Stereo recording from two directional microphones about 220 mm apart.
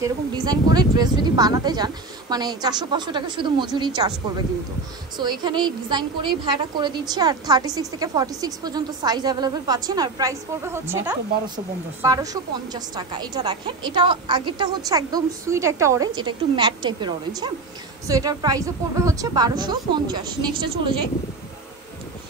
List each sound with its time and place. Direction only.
0.0 s a woman's voice: 15° right (ahead or behind)
5.1 s a woman's voice: 20° right (ahead or behind)